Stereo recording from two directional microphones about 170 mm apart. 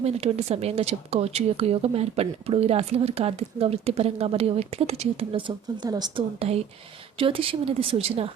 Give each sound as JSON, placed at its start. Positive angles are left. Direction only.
{"t": 0.0, "sound": "speech", "side_deg": -35}